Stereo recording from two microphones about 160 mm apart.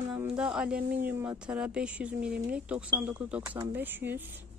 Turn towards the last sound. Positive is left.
turn(degrees=-10)  # may be behind; listen again after turning